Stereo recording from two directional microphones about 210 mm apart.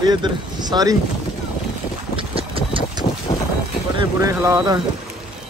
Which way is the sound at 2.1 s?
25° right (ahead or behind).